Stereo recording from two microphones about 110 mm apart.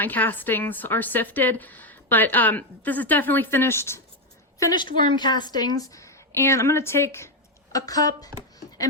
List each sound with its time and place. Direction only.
0.0 s a woman's voice: 15° left (ahead or behind)
4.7 s a woman's voice: 45° left (ahead or behind)